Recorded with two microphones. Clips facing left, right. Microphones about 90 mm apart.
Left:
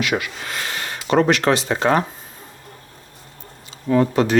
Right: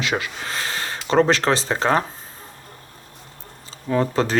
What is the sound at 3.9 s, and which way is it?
Speech, 35° right (ahead or behind).